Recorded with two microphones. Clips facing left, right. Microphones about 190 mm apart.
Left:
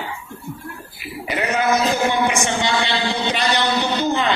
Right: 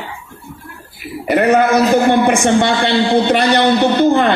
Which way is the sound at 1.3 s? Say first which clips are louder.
Right 8 dB; 55° right (ahead or behind).